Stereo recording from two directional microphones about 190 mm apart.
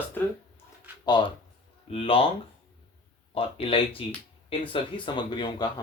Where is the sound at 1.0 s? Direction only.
25° left (ahead or behind).